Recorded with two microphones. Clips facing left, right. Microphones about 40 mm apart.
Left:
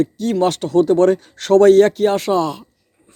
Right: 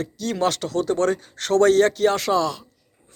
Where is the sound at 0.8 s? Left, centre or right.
Left.